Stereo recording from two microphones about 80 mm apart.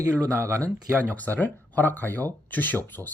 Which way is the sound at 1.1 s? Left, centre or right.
Left.